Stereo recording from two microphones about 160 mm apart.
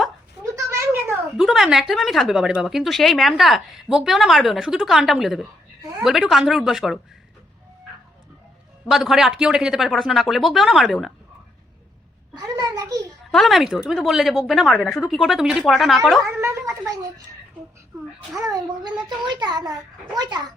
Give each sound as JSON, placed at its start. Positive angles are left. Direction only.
{"t": 0.5, "sound": "a sound", "side_deg": -15}
{"t": 1.4, "sound": "a woman's voice", "side_deg": 0}
{"t": 8.9, "sound": "a woman's voice", "side_deg": 0}
{"t": 12.4, "sound": "a sound", "side_deg": -25}
{"t": 13.3, "sound": "a woman's voice", "side_deg": 0}
{"t": 16.4, "sound": "cat", "side_deg": -15}
{"t": 18.5, "sound": "a child's voice", "side_deg": -25}